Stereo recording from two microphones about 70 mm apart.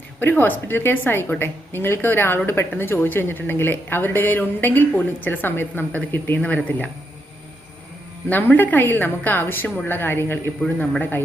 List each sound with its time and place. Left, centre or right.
0.2 s a woman's voice: left
8.3 s a woman's voice: left